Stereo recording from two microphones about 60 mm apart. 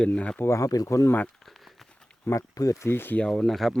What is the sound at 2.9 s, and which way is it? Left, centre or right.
Speech, left.